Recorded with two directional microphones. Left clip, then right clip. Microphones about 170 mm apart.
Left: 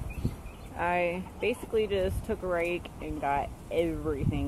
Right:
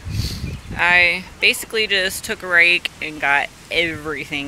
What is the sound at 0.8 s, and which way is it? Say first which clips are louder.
Speech: right 14 dB; centre (ahead or behind).